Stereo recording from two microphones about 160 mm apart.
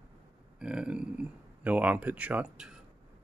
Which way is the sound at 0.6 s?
5° right (ahead or behind).